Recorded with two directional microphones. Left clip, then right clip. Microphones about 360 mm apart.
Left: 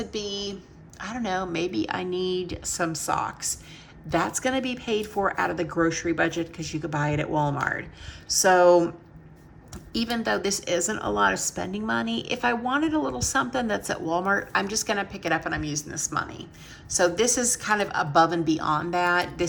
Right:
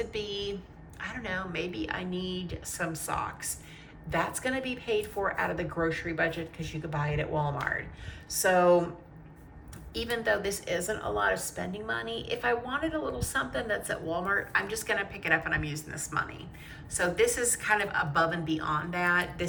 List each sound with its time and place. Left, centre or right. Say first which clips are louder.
0.0 s a sound: left 3 dB; centre
0.9 s a woman's voice: left 6 dB; centre
10.0 s a woman's voice: left 3 dB; centre